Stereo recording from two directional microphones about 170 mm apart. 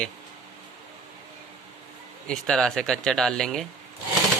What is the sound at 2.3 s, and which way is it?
Speech, 5° left (ahead or behind).